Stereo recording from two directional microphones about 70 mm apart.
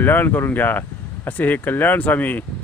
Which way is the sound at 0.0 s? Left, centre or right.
Left.